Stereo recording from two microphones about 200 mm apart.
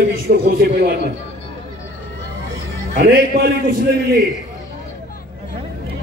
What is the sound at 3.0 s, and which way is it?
Speech, 50° right (ahead or behind).